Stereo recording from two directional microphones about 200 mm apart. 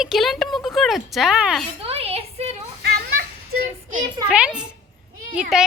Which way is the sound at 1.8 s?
30° right (ahead or behind).